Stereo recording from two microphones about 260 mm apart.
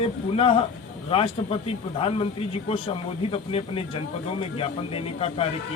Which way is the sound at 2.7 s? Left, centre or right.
Left.